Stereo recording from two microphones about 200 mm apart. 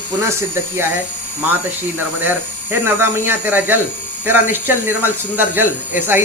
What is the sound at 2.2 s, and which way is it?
Speech, 10° right (ahead or behind).